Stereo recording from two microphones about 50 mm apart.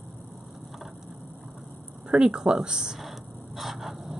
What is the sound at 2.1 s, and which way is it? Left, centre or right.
Speech, centre.